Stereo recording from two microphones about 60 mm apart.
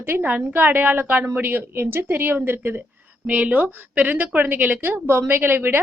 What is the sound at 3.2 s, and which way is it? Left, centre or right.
A woman's voice, right.